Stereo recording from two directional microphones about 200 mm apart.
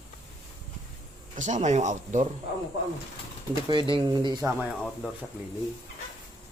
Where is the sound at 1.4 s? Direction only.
35° right (ahead or behind).